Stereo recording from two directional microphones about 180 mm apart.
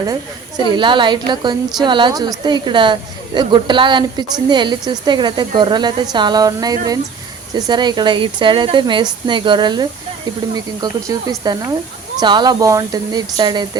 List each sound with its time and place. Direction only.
0.0 s speech: 20° right (ahead or behind)